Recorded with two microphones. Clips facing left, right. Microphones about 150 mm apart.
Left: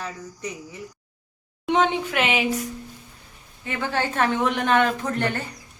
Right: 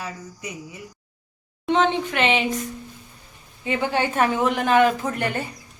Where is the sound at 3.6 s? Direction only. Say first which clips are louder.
Right 3 dB; 15° right (ahead or behind).